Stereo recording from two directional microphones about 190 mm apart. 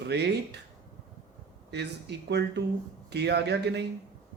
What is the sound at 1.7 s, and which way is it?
A man's voice, 65° right (ahead or behind).